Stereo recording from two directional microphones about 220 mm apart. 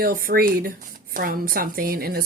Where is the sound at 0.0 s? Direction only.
40° right (ahead or behind).